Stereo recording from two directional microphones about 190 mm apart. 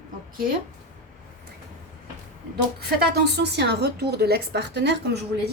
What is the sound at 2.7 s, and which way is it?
A woman's voice, 60° right (ahead or behind).